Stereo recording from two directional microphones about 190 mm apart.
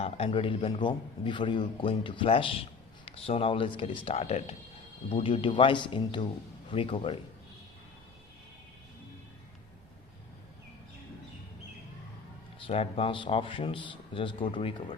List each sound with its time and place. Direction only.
0.0 s a man's voice: 30° left (ahead or behind)
12.5 s a man's voice: 30° left (ahead or behind)